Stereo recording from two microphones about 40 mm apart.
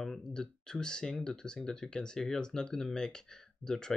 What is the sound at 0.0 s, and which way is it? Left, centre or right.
Speech, centre.